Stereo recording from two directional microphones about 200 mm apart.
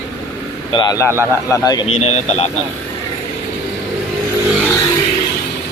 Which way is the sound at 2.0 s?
30° left (ahead or behind).